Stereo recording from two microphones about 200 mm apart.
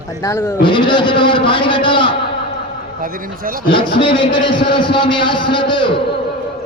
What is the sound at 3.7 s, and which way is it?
A man's voice, 25° left (ahead or behind).